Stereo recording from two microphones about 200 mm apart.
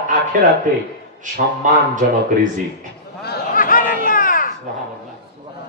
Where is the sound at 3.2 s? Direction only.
50° left (ahead or behind).